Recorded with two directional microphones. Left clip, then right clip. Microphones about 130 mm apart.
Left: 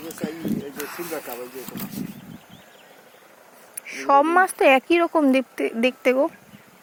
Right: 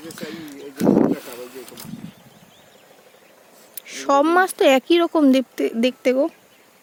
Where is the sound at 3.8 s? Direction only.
60° right (ahead or behind).